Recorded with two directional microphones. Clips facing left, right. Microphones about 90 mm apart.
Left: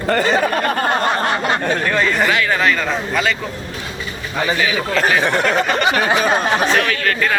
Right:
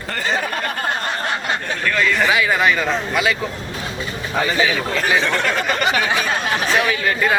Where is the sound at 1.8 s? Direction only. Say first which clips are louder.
Right 2 dB; 30° left (ahead or behind).